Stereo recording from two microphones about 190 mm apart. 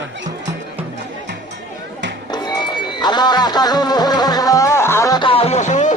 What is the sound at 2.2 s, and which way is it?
Music, 20° left (ahead or behind).